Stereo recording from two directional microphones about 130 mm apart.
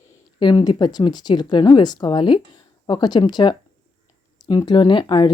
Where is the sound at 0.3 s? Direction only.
35° left (ahead or behind).